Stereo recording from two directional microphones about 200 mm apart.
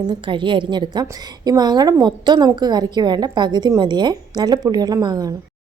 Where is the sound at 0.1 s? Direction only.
25° right (ahead or behind).